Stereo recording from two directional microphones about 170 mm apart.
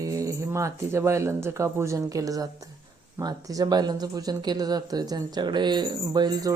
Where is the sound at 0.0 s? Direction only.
20° right (ahead or behind).